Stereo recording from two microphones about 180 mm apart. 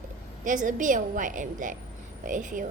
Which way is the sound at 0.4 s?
45° right (ahead or behind).